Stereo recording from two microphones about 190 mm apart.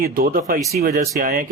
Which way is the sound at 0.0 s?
50° right (ahead or behind).